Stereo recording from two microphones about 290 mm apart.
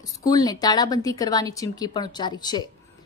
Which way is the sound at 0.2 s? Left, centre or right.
Centre.